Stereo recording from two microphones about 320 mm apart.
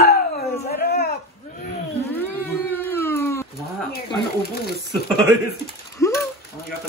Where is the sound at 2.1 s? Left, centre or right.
Centre.